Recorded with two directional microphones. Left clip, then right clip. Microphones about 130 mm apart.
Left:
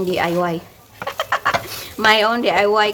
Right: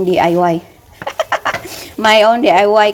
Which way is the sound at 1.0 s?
30° right (ahead or behind).